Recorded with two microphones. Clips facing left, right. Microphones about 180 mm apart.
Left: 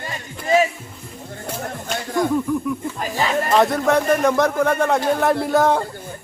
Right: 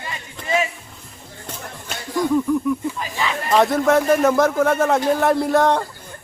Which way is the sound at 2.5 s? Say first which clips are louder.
Right 2 dB; centre (ahead or behind).